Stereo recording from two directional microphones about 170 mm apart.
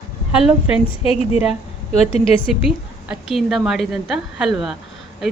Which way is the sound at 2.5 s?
Centre (ahead or behind).